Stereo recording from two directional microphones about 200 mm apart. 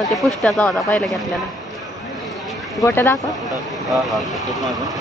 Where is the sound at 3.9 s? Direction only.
Centre (ahead or behind).